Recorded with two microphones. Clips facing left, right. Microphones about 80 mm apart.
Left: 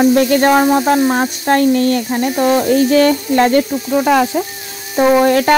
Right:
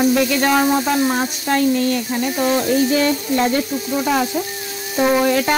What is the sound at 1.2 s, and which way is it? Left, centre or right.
Speech, left.